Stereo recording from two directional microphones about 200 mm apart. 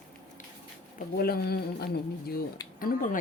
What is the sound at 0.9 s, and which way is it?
Speech, 50° left (ahead or behind).